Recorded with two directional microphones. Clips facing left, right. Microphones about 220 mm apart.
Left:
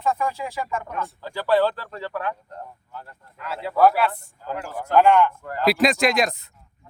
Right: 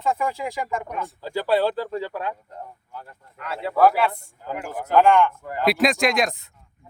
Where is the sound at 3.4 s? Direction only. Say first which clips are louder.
Even; centre (ahead or behind).